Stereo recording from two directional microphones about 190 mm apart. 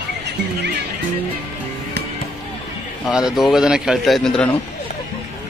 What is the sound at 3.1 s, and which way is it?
A man's voice, 5° right (ahead or behind).